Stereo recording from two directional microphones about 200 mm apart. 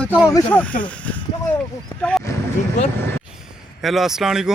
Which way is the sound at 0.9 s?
5° left (ahead or behind).